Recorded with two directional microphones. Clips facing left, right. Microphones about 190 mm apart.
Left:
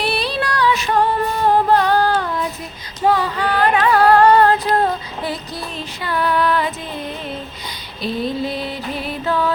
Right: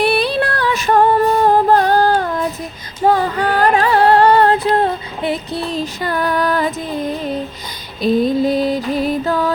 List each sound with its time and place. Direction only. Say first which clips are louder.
0.0 s music: right 6 dB; 50° right (ahead or behind); by 5.6 s 25° right (ahead or behind)
5.7 s music: right 2 dB; 45° right (ahead or behind)